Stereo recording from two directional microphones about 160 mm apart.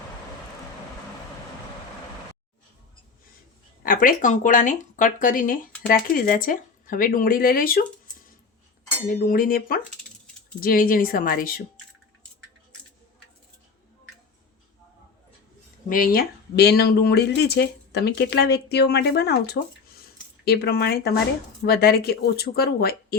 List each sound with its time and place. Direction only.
3.8 s speech: 60° left (ahead or behind)
9.2 s speech: 60° left (ahead or behind)
15.9 s speech: 70° left (ahead or behind)